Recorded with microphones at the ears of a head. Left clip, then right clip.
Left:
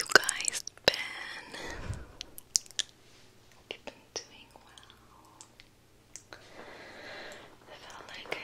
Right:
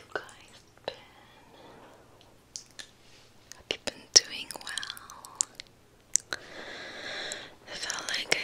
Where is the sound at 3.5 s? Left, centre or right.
Right.